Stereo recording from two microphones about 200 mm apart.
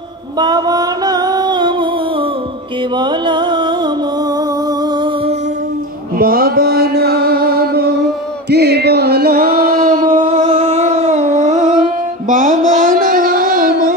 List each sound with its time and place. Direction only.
0.4 s music: 20° right (ahead or behind)
3.0 s music: 20° right (ahead or behind)
6.1 s mantra: 45° right (ahead or behind)
8.5 s music: 55° right (ahead or behind)
10.2 s a sound: 25° right (ahead or behind); by 13.9 s 45° right (ahead or behind)